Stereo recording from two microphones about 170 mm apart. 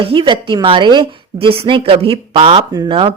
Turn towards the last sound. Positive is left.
turn(degrees=-30)  # may be behind; listen again after turning